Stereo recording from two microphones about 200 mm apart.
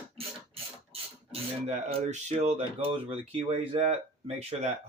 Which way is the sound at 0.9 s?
30° right (ahead or behind).